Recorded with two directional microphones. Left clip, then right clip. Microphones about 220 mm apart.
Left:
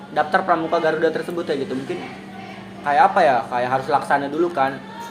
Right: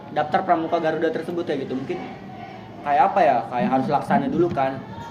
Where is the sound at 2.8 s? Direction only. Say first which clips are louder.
Left 2 dB; 25° right (ahead or behind).